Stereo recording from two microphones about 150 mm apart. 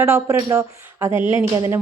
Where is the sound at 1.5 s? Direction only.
25° right (ahead or behind).